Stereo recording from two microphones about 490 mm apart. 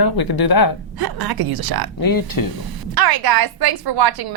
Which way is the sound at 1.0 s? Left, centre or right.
Right.